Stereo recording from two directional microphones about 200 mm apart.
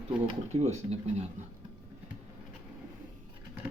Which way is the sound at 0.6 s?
35° right (ahead or behind).